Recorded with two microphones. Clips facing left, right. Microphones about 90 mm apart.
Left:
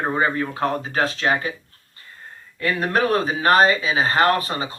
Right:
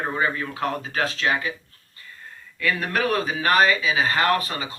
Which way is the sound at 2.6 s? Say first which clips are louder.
Left 3 dB; 35° left (ahead or behind).